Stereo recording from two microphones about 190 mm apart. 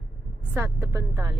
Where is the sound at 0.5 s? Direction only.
15° right (ahead or behind).